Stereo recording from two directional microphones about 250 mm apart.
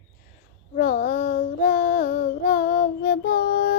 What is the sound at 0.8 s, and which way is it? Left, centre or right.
Child singing, left.